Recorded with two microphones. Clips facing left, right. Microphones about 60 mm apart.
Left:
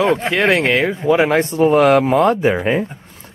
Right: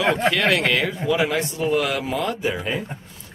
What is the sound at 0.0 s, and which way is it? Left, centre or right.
Speech, left.